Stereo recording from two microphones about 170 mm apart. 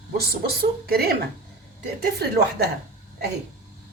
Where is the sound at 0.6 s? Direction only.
65° right (ahead or behind).